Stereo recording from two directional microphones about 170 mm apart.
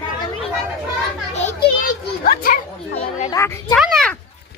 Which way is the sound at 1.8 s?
55° left (ahead or behind).